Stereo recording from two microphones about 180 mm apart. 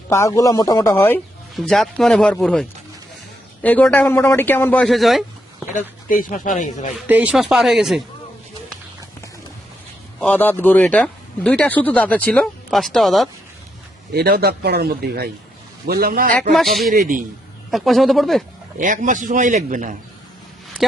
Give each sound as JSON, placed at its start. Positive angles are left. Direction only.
{"t": 0.1, "sound": "speech", "side_deg": 15}
{"t": 1.5, "sound": "speech", "side_deg": 0}
{"t": 5.7, "sound": "speech", "side_deg": 45}
{"t": 6.9, "sound": "speech", "side_deg": -5}
{"t": 10.2, "sound": "speech", "side_deg": 10}
{"t": 14.1, "sound": "speech", "side_deg": -60}
{"t": 16.5, "sound": "speech", "side_deg": 0}
{"t": 16.9, "sound": "a man's voice", "side_deg": -50}
{"t": 17.7, "sound": "speech", "side_deg": 0}
{"t": 18.8, "sound": "a man's voice", "side_deg": -45}